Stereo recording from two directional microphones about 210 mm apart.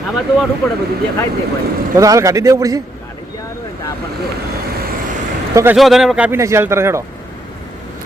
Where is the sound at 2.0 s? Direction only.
15° right (ahead or behind).